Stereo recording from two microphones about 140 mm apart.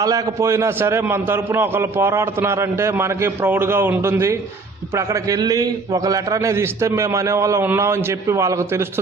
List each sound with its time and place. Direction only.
0.0 s a man's voice: 20° right (ahead or behind)